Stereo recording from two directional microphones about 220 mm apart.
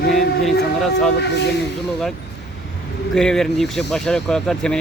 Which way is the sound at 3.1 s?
5° left (ahead or behind).